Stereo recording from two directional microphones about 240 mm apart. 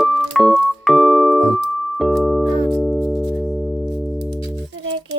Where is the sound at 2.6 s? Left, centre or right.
Centre.